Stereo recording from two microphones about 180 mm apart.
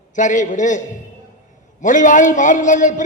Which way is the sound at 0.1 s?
45° left (ahead or behind).